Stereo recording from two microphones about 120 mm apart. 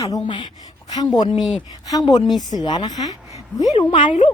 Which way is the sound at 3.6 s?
40° left (ahead or behind).